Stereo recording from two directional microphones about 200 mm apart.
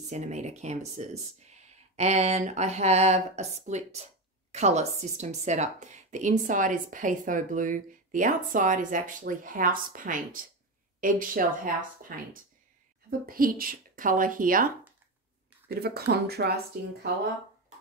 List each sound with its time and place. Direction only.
0.1 s speech: 35° right (ahead or behind)
13.3 s speech: 45° right (ahead or behind)
15.7 s speech: 50° right (ahead or behind)